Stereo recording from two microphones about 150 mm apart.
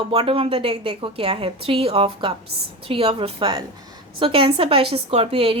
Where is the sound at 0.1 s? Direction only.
40° right (ahead or behind).